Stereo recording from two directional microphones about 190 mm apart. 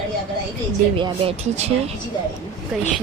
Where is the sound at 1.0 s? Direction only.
35° right (ahead or behind).